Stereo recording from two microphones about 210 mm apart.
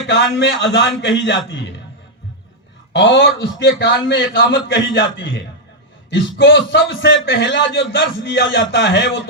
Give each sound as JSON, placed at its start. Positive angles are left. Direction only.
{"t": 0.1, "sound": "a man's voice", "side_deg": 55}
{"t": 2.9, "sound": "a man's voice", "side_deg": 60}